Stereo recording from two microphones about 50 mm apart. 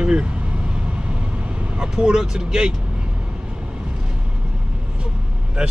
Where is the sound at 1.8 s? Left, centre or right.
Centre.